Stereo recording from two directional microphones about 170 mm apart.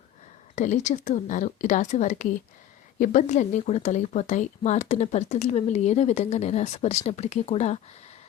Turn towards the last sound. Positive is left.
turn(degrees=40)  # may be behind; listen again after turning